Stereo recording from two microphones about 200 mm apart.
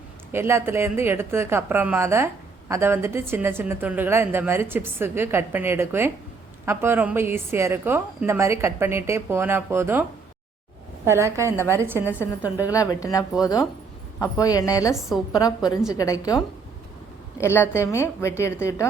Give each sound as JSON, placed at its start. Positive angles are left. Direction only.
{"t": 0.3, "sound": "speech", "side_deg": -10}
{"t": 12.6, "sound": "a woman's voice", "side_deg": 15}